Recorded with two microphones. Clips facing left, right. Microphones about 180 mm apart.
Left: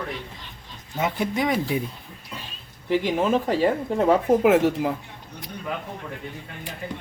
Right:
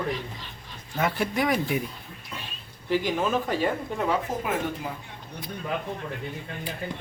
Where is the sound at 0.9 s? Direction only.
20° left (ahead or behind).